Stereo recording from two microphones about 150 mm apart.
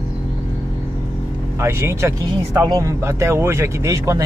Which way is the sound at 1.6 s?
15° right (ahead or behind).